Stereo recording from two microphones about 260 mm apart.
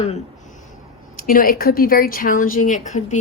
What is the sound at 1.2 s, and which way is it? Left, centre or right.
A woman's voice, left.